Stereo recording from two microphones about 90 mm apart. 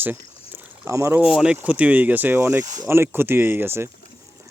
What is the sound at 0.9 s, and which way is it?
Speech, 35° right (ahead or behind).